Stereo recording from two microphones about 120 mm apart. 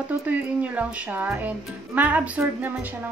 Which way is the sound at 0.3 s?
10° right (ahead or behind).